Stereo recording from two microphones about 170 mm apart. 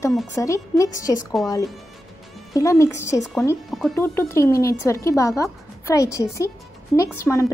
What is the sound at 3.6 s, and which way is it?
Music, centre (ahead or behind).